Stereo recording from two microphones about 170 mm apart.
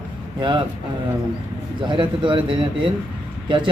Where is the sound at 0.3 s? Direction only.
30° right (ahead or behind).